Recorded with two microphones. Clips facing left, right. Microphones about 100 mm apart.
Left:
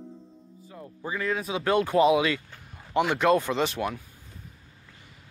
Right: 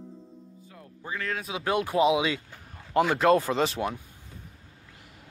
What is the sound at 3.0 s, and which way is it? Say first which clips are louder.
Speech: right 1 dB; 30° right (ahead or behind).